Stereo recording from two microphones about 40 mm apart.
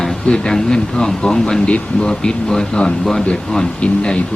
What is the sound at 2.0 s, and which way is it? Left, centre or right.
A man's voice, centre.